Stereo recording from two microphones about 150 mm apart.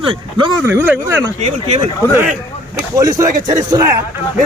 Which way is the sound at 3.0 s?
20° right (ahead or behind).